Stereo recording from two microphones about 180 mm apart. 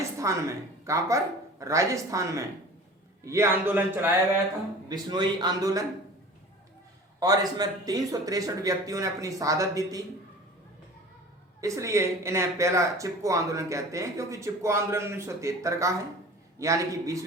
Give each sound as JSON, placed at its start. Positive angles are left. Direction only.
{"t": 0.0, "sound": "speech", "side_deg": -15}
{"t": 4.9, "sound": "speech", "side_deg": -25}
{"t": 7.2, "sound": "speech", "side_deg": -20}
{"t": 11.6, "sound": "speech", "side_deg": -15}